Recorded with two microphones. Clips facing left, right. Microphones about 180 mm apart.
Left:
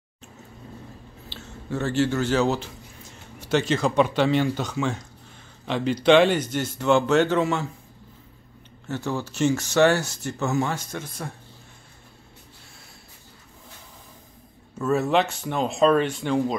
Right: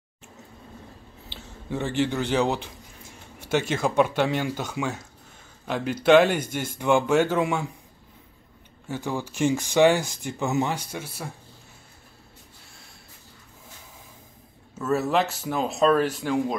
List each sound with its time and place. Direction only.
1.3 s speech: 15° right (ahead or behind)
6.0 s speech: 5° right (ahead or behind)
8.8 s speech: 10° right (ahead or behind)
14.8 s speech: centre (ahead or behind)